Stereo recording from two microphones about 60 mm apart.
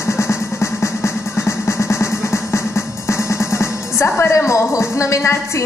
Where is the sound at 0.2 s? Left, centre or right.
Left.